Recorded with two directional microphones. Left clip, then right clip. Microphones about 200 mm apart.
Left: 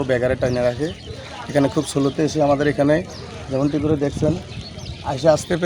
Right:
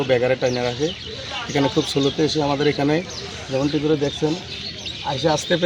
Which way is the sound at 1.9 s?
25° left (ahead or behind).